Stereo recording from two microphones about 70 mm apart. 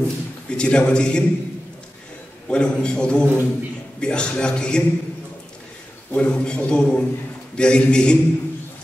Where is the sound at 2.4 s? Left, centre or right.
Centre.